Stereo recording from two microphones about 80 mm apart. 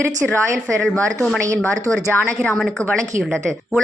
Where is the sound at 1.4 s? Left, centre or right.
Right.